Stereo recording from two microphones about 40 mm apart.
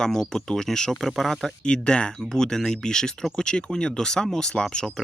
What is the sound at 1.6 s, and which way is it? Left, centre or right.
Speech, left.